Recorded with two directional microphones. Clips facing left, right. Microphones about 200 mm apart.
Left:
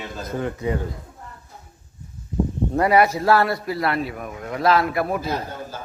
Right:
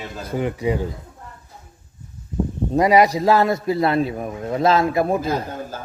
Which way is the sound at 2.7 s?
15° right (ahead or behind).